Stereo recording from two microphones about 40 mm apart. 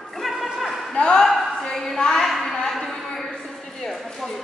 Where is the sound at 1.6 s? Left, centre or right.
Centre.